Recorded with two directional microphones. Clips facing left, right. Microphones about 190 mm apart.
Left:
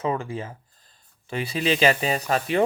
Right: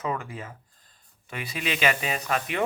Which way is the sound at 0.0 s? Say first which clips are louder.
Left 5 dB; 30° left (ahead or behind).